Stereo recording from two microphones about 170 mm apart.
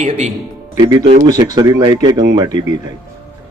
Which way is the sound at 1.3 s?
20° right (ahead or behind).